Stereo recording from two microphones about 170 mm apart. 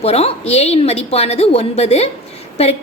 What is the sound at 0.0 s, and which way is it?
A woman's voice, 35° left (ahead or behind).